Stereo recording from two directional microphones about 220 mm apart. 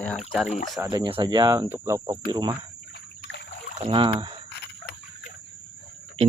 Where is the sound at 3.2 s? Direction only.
50° left (ahead or behind).